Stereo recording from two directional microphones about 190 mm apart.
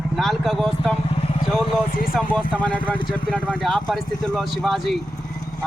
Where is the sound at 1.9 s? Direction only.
50° left (ahead or behind).